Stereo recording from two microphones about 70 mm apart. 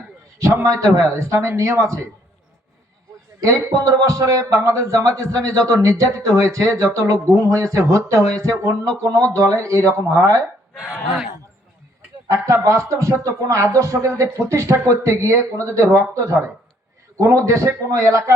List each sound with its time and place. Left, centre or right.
0.6 s a man's voice: right
3.4 s a man's voice: right
12.3 s a man's voice: right